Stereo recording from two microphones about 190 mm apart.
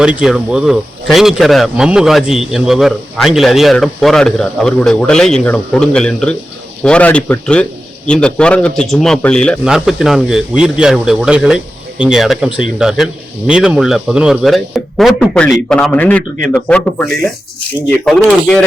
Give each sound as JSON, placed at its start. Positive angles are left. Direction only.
{"t": 0.0, "sound": "a man's voice", "side_deg": -5}